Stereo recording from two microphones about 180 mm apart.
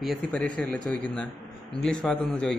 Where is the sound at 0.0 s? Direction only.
5° left (ahead or behind).